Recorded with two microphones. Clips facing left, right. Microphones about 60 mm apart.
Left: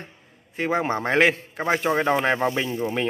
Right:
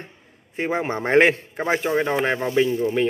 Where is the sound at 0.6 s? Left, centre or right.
Centre.